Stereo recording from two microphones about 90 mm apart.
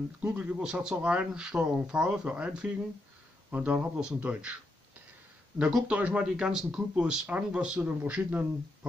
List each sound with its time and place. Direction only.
0.6 s speech: 10° right (ahead or behind)
5.6 s speech: 5° right (ahead or behind)
5.9 s speech: 15° right (ahead or behind)